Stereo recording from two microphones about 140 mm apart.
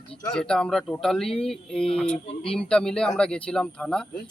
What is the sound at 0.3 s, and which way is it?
Speech, 5° left (ahead or behind).